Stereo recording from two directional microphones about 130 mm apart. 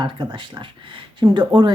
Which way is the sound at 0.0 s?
40° right (ahead or behind).